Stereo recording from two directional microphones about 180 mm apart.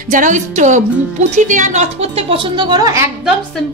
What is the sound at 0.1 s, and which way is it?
A woman's voice, 45° right (ahead or behind).